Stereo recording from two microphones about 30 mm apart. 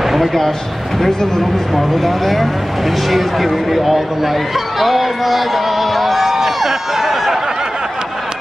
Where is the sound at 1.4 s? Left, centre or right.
Centre.